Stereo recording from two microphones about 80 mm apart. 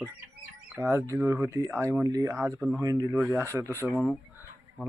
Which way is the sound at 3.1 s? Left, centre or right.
Right.